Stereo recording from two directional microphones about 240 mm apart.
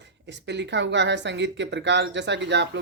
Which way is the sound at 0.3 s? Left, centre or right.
Right.